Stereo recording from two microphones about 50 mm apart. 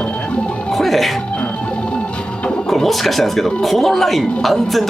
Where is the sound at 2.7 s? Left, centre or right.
Centre.